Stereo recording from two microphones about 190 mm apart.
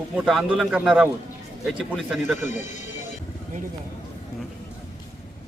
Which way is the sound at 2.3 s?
40° left (ahead or behind).